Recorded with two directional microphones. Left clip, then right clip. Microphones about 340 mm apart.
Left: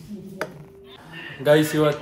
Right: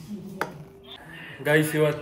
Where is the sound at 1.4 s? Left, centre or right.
Centre.